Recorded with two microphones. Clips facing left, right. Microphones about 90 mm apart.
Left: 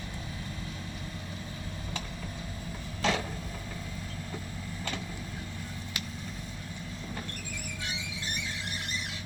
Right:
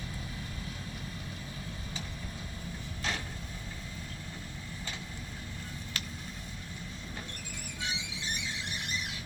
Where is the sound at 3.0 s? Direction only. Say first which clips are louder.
Left 8 dB; 90° left.